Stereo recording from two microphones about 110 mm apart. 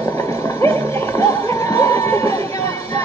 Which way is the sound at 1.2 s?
25° left (ahead or behind).